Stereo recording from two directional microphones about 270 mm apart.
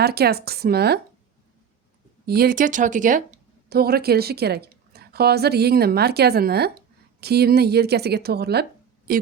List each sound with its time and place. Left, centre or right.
0.0 s a woman's voice: right
2.2 s a woman's voice: right